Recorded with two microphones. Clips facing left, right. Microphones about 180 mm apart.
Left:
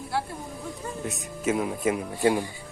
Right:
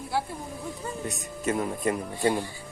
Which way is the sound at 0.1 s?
Centre (ahead or behind).